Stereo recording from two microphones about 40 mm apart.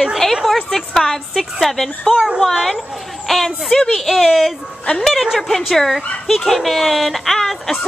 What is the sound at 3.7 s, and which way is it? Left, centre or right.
Speech, centre.